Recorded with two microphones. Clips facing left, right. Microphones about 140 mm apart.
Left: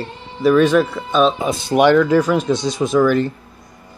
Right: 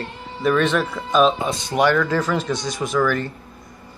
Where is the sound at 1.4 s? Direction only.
15° left (ahead or behind).